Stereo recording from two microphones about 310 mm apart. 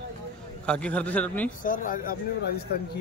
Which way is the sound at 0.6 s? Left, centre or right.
Centre.